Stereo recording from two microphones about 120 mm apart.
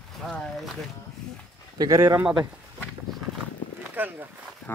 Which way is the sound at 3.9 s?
15° right (ahead or behind).